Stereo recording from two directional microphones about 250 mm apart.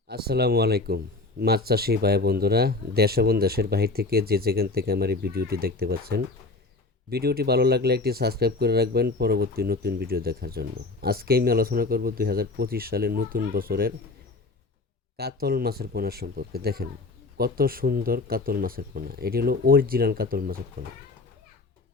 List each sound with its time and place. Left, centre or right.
0.1 s speech: right
15.2 s speech: right